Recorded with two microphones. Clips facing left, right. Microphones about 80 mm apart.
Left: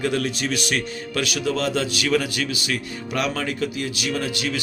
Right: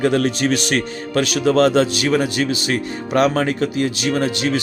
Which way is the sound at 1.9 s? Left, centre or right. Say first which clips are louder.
Right 4 dB; right.